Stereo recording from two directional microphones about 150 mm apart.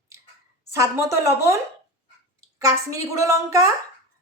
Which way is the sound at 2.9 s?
20° right (ahead or behind).